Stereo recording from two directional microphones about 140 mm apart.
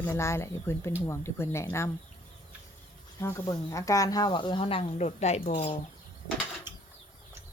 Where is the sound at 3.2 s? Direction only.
25° left (ahead or behind); by 5.8 s 40° left (ahead or behind).